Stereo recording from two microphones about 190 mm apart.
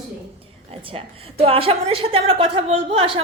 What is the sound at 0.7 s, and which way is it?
A man's voice, 30° right (ahead or behind).